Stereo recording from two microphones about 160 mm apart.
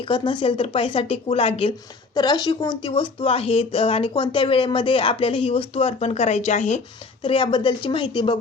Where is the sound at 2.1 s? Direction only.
25° left (ahead or behind); by 6.7 s 45° left (ahead or behind).